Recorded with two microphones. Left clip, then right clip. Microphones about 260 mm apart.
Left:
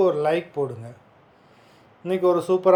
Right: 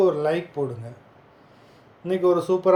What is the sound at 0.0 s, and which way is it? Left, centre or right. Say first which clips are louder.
Speech: left 1 dB; centre.